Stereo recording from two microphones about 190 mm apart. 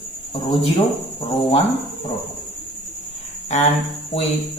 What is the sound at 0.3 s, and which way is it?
Speech, 30° left (ahead or behind).